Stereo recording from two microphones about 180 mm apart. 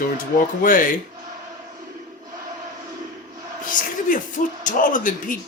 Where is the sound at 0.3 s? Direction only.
50° left (ahead or behind).